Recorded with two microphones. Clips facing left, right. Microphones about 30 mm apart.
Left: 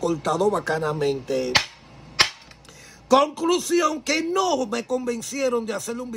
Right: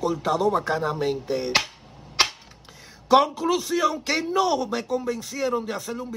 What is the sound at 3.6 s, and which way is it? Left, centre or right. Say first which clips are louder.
Speech: left 2 dB; right.